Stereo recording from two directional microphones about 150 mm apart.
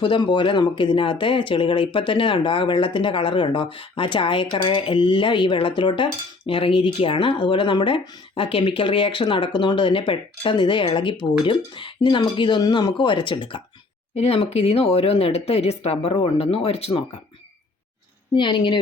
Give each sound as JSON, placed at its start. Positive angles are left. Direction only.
{"t": 0.0, "sound": "speech", "side_deg": 30}
{"t": 14.2, "sound": "speech", "side_deg": 45}
{"t": 18.3, "sound": "speech", "side_deg": 30}